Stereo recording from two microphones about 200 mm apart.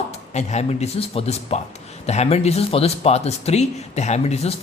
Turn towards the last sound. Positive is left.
turn(degrees=30)  # may be behind; listen again after turning